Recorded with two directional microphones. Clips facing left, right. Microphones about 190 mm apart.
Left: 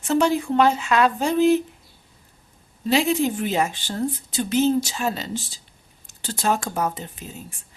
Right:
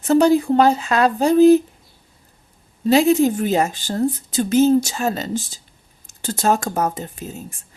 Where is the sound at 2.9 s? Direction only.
45° right (ahead or behind).